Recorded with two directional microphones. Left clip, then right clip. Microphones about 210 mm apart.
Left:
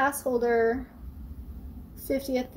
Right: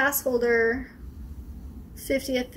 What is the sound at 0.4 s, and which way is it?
Speech, 10° right (ahead or behind).